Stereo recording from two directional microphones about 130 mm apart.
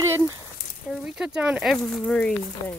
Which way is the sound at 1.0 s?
5° right (ahead or behind).